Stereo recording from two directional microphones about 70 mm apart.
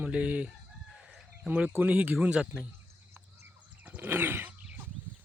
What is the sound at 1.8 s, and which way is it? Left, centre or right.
Speech, right.